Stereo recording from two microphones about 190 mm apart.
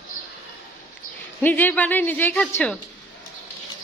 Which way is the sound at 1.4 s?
10° left (ahead or behind).